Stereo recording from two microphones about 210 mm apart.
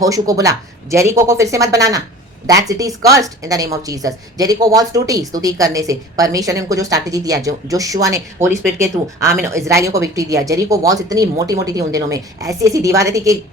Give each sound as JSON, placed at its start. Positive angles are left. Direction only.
{"t": 0.0, "sound": "a woman's voice", "side_deg": -15}